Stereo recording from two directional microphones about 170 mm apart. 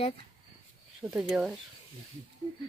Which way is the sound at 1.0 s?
5° right (ahead or behind).